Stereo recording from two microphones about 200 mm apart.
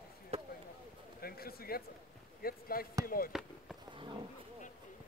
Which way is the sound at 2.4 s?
45° left (ahead or behind).